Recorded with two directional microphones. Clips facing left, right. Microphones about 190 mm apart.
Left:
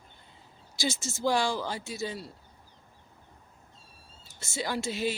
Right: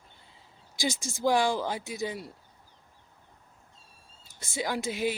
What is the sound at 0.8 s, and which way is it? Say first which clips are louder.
Speech: right 1 dB; 15° right (ahead or behind).